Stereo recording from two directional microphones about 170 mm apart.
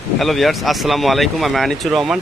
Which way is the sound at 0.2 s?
Centre (ahead or behind).